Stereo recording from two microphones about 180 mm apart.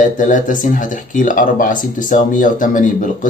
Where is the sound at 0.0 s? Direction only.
45° left (ahead or behind).